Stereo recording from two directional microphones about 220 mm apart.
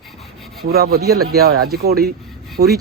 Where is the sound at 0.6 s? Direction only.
45° right (ahead or behind).